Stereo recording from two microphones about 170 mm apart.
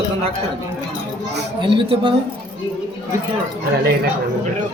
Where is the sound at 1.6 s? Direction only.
30° right (ahead or behind).